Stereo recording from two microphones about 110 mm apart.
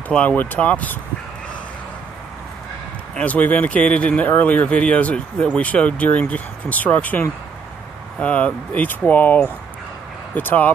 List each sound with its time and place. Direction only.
0.1 s speech: 10° left (ahead or behind)
3.2 s speech: 15° left (ahead or behind)